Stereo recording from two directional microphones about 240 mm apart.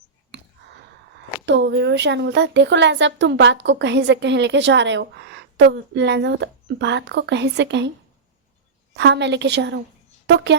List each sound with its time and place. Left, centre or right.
1.5 s speech: right
9.0 s speech: right